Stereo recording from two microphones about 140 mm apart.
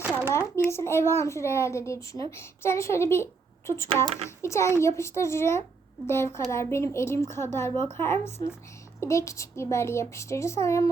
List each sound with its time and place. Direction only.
0.3 s a child's voice: 20° left (ahead or behind)
8.4 s speech: 30° left (ahead or behind)
9.0 s a child's voice: 20° left (ahead or behind)